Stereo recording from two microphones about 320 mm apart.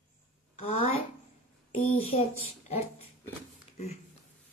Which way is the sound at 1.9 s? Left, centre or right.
Centre.